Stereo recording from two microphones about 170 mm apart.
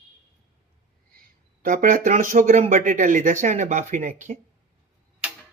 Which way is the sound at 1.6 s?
55° right (ahead or behind).